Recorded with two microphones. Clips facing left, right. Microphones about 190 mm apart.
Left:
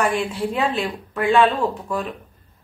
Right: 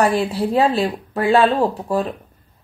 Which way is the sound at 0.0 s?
35° right (ahead or behind).